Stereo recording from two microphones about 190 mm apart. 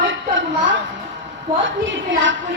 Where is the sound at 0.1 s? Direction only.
80° right.